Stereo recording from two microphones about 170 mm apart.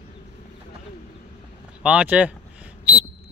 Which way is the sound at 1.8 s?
5° right (ahead or behind).